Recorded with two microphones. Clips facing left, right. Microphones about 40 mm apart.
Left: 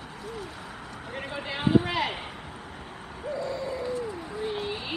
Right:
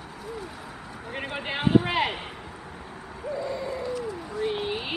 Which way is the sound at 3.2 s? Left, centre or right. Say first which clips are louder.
Right 1 dB; centre.